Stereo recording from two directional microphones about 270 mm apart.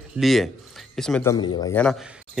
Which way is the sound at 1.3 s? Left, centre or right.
Centre.